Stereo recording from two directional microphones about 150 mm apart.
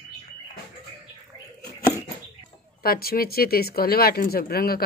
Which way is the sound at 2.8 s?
90° left.